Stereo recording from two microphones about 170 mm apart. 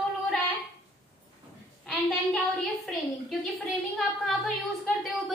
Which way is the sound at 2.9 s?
Centre (ahead or behind).